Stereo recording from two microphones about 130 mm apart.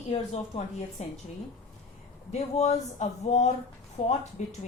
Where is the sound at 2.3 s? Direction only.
60° left (ahead or behind).